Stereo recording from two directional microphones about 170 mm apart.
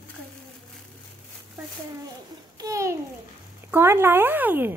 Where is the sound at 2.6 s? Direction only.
20° right (ahead or behind).